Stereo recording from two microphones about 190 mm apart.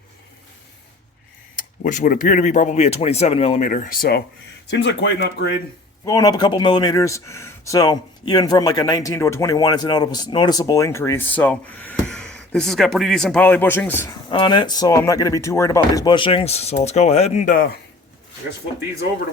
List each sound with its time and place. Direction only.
1.5 s speech: 45° left (ahead or behind)
3.6 s speech: 45° left (ahead or behind)
4.7 s speech: 65° left (ahead or behind)
6.1 s speech: 20° left (ahead or behind)
14.3 s speech: 25° left (ahead or behind); by 17.7 s 45° left (ahead or behind)